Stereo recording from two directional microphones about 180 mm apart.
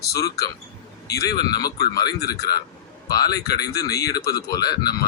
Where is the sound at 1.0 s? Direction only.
20° left (ahead or behind).